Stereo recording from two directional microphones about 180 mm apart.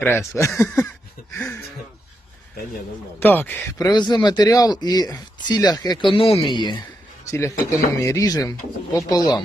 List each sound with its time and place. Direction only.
0.0 s speech: 15° left (ahead or behind)
3.2 s speech: 10° left (ahead or behind); by 6.7 s 25° left (ahead or behind)
7.3 s speech: 15° left (ahead or behind)